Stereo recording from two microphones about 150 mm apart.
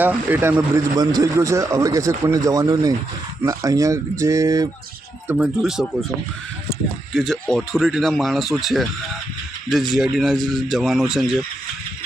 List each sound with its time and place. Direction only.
0.0 s speech: 10° right (ahead or behind)
0.9 s a man's voice: 25° right (ahead or behind)
5.3 s speech: 5° right (ahead or behind)
7.1 s speech: centre (ahead or behind)